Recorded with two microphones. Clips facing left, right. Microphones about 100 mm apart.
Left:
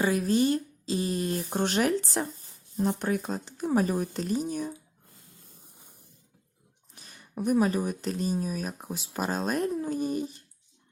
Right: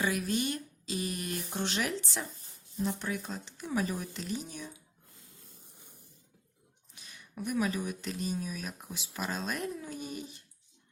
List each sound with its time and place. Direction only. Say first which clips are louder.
0.0 s speech: left 7 dB; 35° left (ahead or behind)
6.9 s speech: left 7 dB; 40° left (ahead or behind)